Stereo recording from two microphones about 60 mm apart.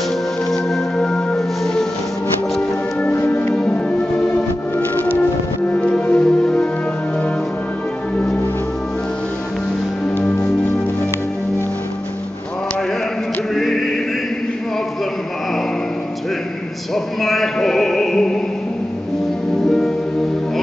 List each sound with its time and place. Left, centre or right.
0.5 s music: centre
3.3 s music: left
5.8 s music: centre
13.6 s choir: centre
16.9 s music: centre